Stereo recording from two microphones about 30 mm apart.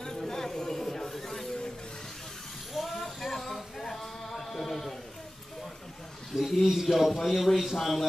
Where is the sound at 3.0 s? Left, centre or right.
Centre.